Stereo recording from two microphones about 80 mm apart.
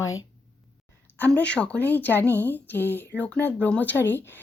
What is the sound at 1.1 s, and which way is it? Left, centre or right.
Speech, centre.